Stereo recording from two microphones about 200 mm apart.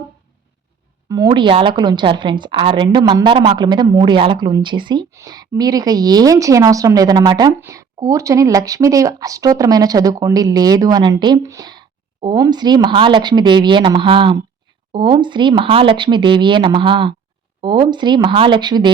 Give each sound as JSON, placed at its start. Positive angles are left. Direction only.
{"t": 1.0, "sound": "a woman's voice", "side_deg": -20}